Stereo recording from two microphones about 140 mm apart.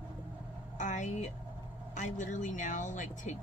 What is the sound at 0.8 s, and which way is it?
Speech, 60° left (ahead or behind).